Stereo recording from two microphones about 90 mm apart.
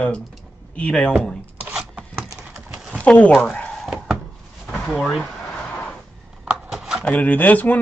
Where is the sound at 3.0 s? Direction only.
15° left (ahead or behind).